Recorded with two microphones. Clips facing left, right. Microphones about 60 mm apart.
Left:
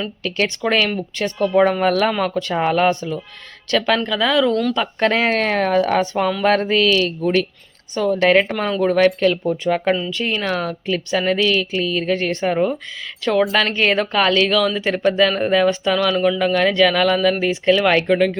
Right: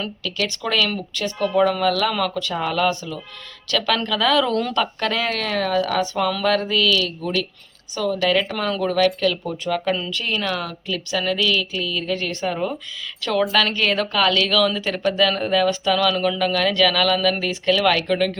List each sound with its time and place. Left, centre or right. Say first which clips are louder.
0.2 s speech: left 7 dB; left; by 4.6 s centre
4.9 s speech: left 6 dB; left
8.4 s speech: left 4 dB; left
13.7 s speech: left 3 dB; left